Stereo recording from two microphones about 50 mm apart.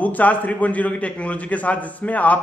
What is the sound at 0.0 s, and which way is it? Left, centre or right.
A man's voice, left.